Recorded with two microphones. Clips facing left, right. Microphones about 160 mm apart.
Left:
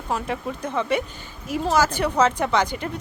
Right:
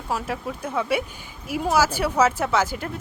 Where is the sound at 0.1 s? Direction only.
5° right (ahead or behind).